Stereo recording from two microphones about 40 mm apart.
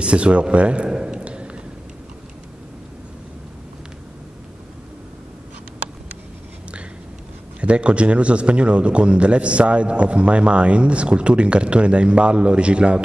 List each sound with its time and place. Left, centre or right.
0.0 s a man's voice: right
1.2 s a sound: right
7.6 s a man's voice: right